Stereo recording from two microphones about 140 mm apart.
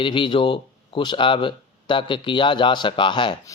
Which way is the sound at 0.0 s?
35° left (ahead or behind).